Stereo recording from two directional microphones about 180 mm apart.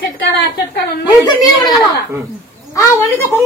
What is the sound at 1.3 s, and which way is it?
A woman's voice, 20° left (ahead or behind).